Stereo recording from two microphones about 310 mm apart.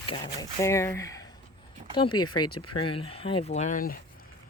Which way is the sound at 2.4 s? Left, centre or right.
Left.